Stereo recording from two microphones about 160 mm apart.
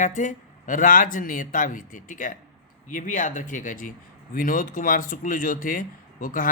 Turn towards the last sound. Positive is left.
turn(degrees=60)  # may be behind; listen again after turning